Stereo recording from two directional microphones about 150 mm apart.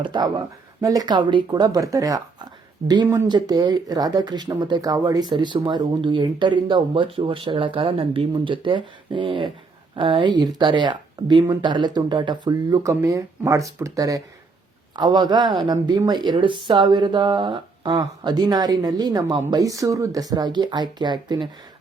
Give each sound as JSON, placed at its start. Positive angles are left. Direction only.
{"t": 0.0, "sound": "speech", "side_deg": -30}